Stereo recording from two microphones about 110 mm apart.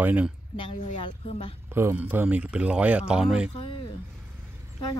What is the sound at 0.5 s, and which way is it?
A woman's voice, 55° left (ahead or behind).